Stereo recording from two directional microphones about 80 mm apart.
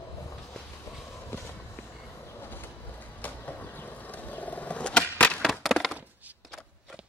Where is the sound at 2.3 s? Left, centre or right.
Left.